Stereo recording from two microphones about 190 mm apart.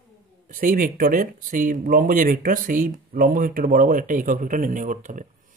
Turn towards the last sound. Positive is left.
turn(degrees=-40)  # may be behind; listen again after turning